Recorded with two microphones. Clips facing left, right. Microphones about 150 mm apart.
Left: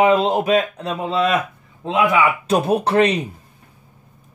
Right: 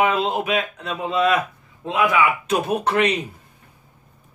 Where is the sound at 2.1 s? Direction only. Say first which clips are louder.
Left 1 dB; 35° left (ahead or behind).